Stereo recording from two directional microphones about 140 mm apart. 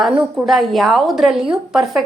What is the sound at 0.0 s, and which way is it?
A woman's voice, centre (ahead or behind).